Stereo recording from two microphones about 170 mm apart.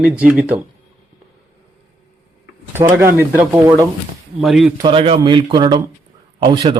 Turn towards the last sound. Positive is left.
turn(degrees=-25)  # may be behind; listen again after turning